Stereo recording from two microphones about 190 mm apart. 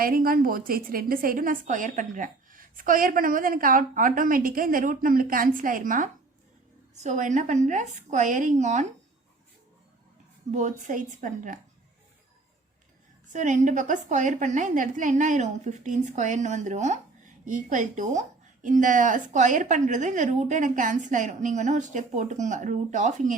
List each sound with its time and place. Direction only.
0.0 s a woman's voice: 50° right (ahead or behind)
10.5 s a woman's voice: 40° right (ahead or behind)
13.3 s a woman's voice: 40° right (ahead or behind)